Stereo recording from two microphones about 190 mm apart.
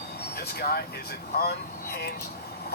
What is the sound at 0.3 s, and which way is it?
Speech, 55° left (ahead or behind).